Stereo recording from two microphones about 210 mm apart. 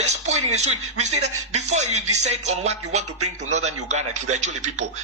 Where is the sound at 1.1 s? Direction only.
90° right.